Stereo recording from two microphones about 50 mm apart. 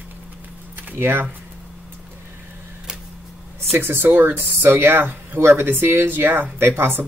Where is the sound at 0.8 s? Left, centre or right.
Right.